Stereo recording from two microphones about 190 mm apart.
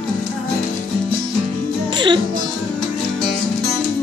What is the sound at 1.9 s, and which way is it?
Music, 25° right (ahead or behind).